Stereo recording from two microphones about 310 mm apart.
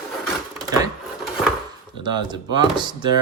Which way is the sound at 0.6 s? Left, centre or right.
Centre.